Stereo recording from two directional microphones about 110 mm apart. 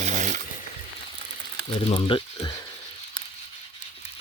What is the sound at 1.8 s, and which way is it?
Speech, 50° left (ahead or behind).